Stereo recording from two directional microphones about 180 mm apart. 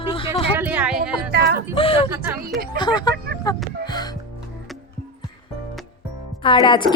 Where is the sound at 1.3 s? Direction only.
65° right (ahead or behind).